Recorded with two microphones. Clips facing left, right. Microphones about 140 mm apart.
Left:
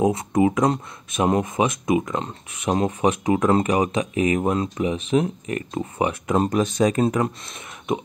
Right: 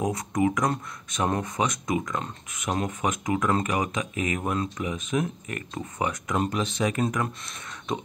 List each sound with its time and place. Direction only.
0.0 s speech: 25° left (ahead or behind)